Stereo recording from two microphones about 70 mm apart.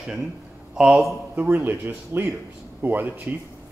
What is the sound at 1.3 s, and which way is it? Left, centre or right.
Speech, right.